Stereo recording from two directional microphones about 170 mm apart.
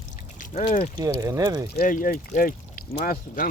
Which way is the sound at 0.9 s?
20° right (ahead or behind).